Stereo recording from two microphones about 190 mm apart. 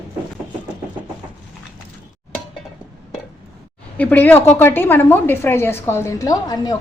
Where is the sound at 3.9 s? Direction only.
10° left (ahead or behind).